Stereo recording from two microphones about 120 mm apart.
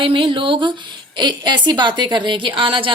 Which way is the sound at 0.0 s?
45° right (ahead or behind).